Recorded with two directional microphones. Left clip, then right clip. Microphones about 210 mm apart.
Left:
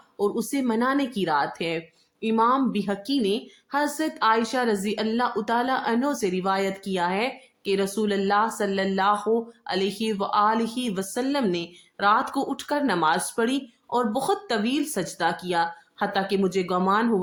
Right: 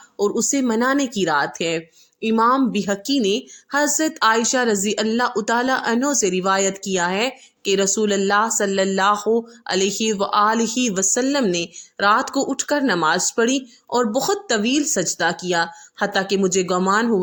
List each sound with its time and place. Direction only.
0.2 s a woman's voice: 25° right (ahead or behind)